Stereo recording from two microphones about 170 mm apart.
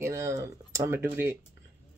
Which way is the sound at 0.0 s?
15° right (ahead or behind).